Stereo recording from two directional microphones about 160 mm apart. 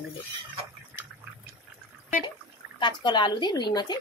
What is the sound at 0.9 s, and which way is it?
Fill, 10° right (ahead or behind).